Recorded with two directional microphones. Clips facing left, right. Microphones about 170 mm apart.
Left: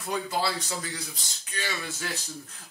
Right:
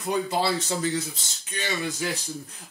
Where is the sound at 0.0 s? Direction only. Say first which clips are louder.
Right 4 dB; 25° right (ahead or behind).